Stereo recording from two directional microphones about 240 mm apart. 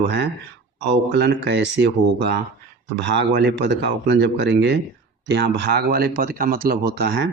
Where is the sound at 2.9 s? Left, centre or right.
Right.